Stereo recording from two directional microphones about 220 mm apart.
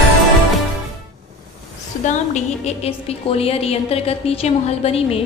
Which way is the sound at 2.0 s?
30° left (ahead or behind).